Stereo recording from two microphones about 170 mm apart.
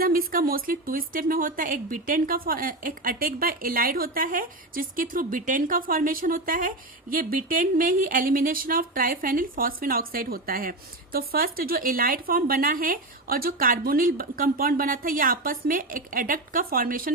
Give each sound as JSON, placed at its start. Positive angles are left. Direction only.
{"t": 0.0, "sound": "a woman's voice", "side_deg": -60}